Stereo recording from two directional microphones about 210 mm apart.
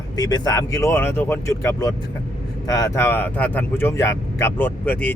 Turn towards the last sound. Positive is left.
turn(degrees=10)  # may be behind; listen again after turning